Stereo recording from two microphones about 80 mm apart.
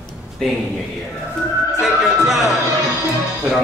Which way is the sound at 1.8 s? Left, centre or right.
Centre.